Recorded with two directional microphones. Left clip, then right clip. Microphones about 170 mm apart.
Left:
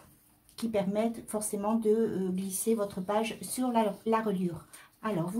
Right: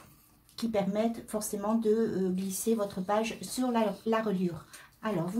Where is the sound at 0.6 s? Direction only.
15° left (ahead or behind).